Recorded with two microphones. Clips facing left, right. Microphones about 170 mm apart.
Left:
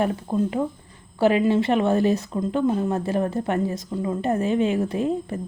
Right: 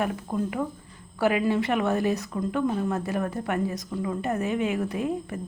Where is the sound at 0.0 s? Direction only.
30° left (ahead or behind).